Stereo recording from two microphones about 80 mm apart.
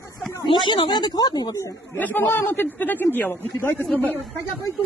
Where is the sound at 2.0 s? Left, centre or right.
Left.